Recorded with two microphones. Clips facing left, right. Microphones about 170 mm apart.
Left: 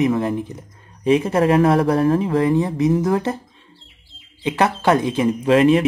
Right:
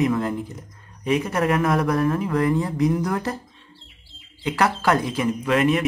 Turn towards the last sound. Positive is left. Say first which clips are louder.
# left 6 dB
turn(degrees=30)  # may be behind; listen again after turning